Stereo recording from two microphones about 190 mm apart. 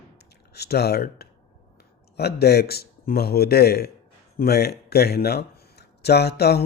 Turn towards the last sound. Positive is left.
turn(degrees=60)  # may be behind; listen again after turning